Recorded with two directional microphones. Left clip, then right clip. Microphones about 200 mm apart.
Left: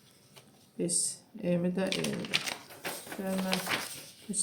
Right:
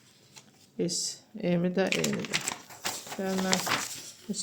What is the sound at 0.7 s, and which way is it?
Speech, 40° right (ahead or behind).